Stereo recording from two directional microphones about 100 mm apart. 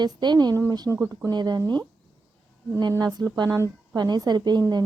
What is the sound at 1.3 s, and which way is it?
Speech, 45° right (ahead or behind).